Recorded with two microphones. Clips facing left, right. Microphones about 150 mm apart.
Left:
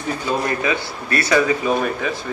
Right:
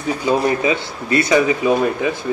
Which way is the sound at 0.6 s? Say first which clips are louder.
Right 3 dB; 25° right (ahead or behind).